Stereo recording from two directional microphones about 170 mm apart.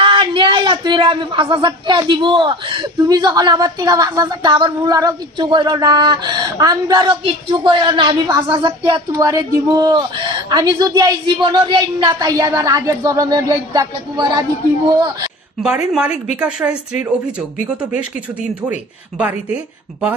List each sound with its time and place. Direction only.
0.0 s a woman's voice: 30° right (ahead or behind)
16.3 s a woman's voice: 5° right (ahead or behind)
18.7 s speech: 10° right (ahead or behind)